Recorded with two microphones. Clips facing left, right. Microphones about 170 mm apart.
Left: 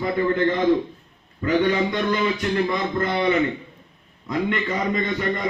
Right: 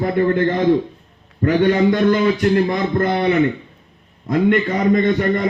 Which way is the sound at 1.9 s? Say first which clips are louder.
Right 7 dB; 50° right (ahead or behind).